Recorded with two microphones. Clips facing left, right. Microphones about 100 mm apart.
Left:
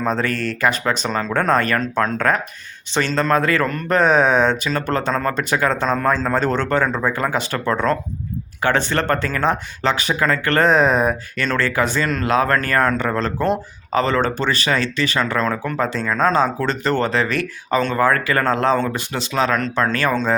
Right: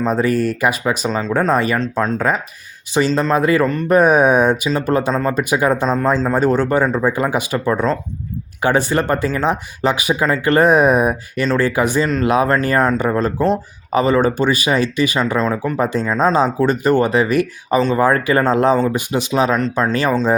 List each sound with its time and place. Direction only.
0.0 s speech: 10° right (ahead or behind)
15.8 s speech: 15° right (ahead or behind)